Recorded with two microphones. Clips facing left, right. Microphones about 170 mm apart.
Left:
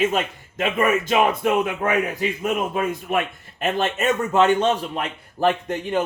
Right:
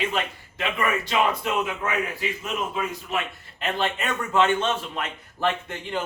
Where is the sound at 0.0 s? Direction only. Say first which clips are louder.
Left 6 dB; 45° left (ahead or behind).